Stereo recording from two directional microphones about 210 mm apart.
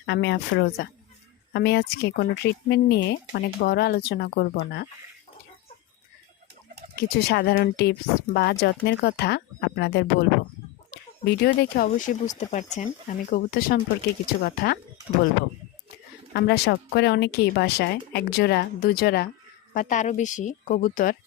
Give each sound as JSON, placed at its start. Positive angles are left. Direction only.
{"t": 0.0, "sound": "a woman's voice", "side_deg": 55}
{"t": 6.9, "sound": "speech", "side_deg": 50}
{"t": 16.3, "sound": "speech", "side_deg": 50}
{"t": 19.7, "sound": "speech", "side_deg": 35}